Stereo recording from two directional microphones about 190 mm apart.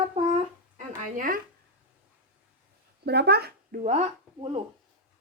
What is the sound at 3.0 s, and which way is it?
A woman's voice, 60° right (ahead or behind).